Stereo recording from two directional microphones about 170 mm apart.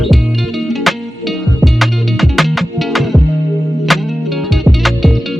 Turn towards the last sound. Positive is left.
turn(degrees=0)  # may be behind; listen again after turning